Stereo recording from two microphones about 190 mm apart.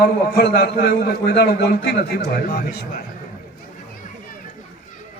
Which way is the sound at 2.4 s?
50° left (ahead or behind).